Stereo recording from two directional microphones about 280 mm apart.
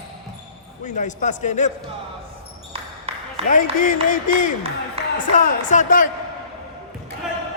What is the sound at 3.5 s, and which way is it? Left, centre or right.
Speech, left.